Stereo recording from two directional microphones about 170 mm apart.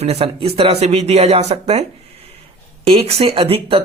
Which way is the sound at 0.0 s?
35° right (ahead or behind).